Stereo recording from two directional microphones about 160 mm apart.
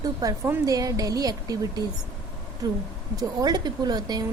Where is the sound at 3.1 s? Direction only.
25° right (ahead or behind).